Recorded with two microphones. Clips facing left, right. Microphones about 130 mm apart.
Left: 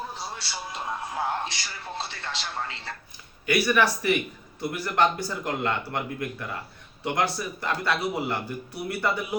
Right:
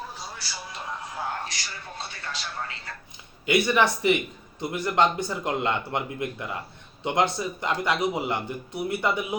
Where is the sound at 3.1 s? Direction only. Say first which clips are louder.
Right 2 dB; 20° right (ahead or behind).